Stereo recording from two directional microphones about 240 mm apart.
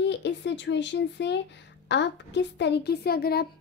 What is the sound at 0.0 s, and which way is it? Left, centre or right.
A woman's voice, left.